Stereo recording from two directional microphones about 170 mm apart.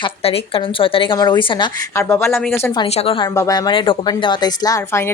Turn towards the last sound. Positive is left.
turn(degrees=20)  # may be behind; listen again after turning